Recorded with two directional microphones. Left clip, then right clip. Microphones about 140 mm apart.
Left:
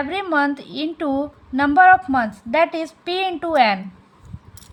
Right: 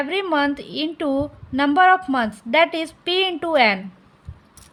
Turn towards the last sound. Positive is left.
turn(degrees=-25)  # may be behind; listen again after turning